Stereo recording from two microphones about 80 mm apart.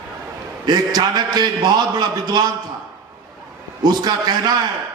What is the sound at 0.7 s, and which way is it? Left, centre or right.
A man's voice, right.